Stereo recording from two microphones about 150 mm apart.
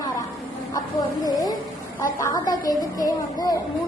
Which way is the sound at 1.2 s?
25° left (ahead or behind).